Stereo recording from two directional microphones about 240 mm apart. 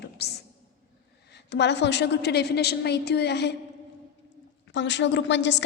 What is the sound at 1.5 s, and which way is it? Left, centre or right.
A woman's voice, left.